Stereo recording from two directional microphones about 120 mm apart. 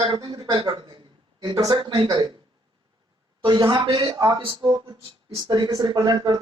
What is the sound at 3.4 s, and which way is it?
Speech, 40° right (ahead or behind).